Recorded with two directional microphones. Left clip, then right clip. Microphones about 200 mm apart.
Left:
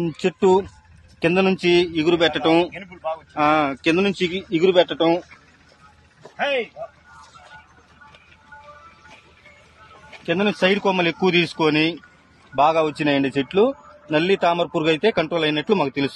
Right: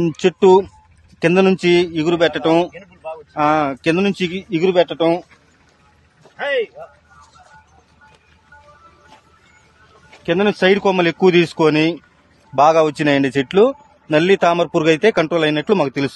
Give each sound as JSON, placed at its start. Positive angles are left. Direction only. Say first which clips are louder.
{"t": 0.0, "sound": "speech", "louder": "right 6 dB", "side_deg": -50}
{"t": 1.2, "sound": "a man's voice", "louder": "right 4 dB", "side_deg": -60}
{"t": 2.8, "sound": "a sound", "louder": "left 3 dB", "side_deg": -5}
{"t": 3.3, "sound": "speech", "louder": "right 3 dB", "side_deg": -60}
{"t": 10.2, "sound": "a man's voice", "louder": "right 4 dB", "side_deg": -55}